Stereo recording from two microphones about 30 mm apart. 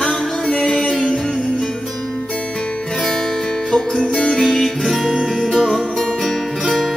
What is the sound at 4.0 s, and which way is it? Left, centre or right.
Music, centre.